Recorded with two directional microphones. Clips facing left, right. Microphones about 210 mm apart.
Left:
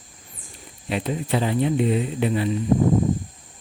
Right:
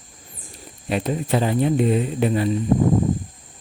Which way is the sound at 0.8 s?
45° right (ahead or behind).